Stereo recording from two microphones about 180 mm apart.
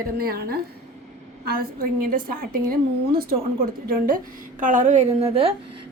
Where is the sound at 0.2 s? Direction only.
60° right (ahead or behind).